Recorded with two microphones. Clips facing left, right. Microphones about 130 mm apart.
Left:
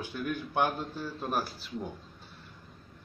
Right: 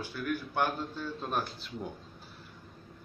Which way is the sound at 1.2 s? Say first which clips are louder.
Left 2 dB; 5° left (ahead or behind).